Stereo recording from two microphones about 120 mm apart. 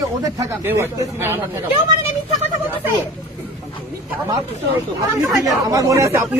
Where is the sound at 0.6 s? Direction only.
20° right (ahead or behind).